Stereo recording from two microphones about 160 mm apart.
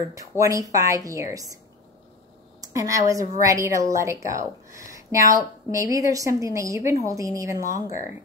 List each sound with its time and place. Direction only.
0.1 s a woman's voice: 20° right (ahead or behind)
2.6 s a woman's voice: 20° right (ahead or behind)